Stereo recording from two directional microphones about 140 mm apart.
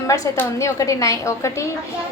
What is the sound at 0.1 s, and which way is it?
A woman's voice, 20° left (ahead or behind).